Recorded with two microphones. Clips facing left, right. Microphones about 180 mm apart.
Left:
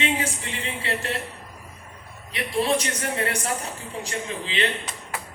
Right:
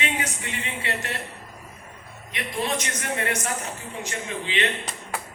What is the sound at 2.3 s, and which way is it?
A man's voice, 30° left (ahead or behind).